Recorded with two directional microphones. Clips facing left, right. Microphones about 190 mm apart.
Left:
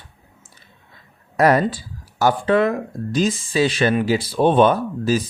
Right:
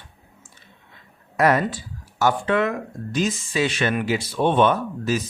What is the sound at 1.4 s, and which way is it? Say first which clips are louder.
Speech: left 3 dB; 35° left (ahead or behind).